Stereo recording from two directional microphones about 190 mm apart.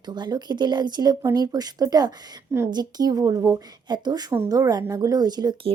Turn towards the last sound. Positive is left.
turn(degrees=-20)  # may be behind; listen again after turning